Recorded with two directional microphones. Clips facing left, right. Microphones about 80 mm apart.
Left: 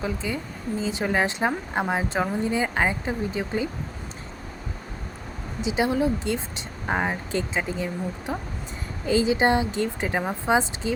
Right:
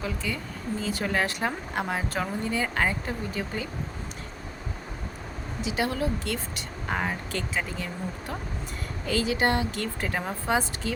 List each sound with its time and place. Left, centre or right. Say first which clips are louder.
0.0 s speech: left 3 dB; left
5.6 s speech: left 5 dB; left